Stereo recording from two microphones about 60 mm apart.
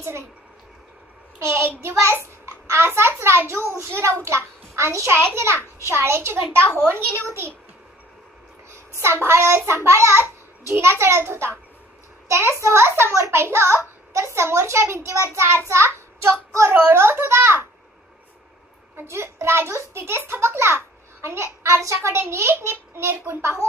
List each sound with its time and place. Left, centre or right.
1.4 s a child's voice: right
1.8 s child singing: right
2.6 s a child's voice: right
8.9 s a child's voice: right
19.0 s a child's voice: right